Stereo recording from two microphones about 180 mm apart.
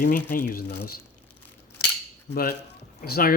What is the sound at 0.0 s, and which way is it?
Speech, 55° left (ahead or behind).